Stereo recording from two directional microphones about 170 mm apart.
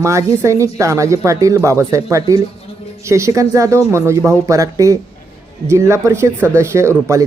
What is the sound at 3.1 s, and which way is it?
Speech, 15° right (ahead or behind).